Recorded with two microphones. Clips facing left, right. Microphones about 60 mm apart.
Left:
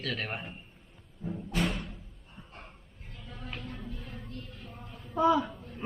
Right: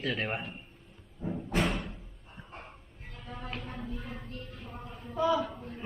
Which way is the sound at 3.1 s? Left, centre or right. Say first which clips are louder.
Right 3 dB; right.